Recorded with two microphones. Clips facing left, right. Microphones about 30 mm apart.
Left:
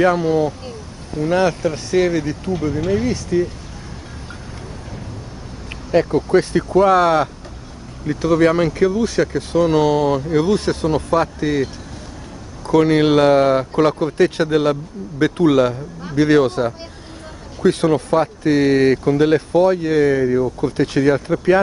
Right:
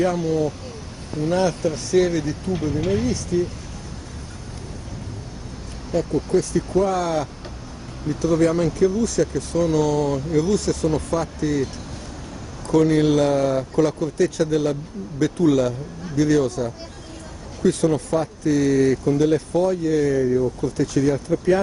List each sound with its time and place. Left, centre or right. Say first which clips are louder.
0.0 s speech: left 6 dB; left
1.2 s speech: left 4 dB; left
5.9 s speech: left 6 dB; left
8.1 s speech: left 4 dB; left
12.6 s speech: left 3 dB; left